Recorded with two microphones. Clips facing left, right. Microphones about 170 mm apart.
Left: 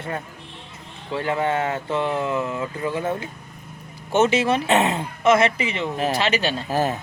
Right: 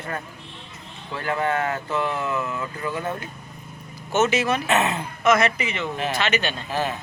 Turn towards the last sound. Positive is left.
turn(degrees=40)  # may be behind; listen again after turning